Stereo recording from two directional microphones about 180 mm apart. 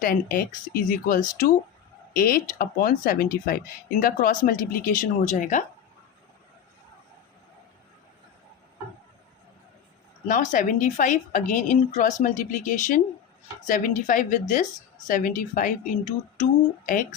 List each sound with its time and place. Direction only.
0.0 s speech: 55° left (ahead or behind)
10.2 s speech: 45° left (ahead or behind)